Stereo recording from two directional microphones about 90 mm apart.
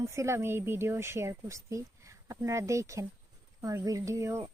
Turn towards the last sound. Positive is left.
turn(degrees=-30)  # may be behind; listen again after turning